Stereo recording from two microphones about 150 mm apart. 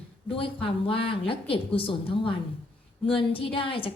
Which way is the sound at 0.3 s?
35° left (ahead or behind).